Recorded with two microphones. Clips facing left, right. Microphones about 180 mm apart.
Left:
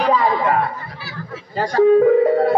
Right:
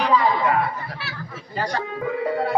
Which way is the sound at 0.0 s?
45° left (ahead or behind).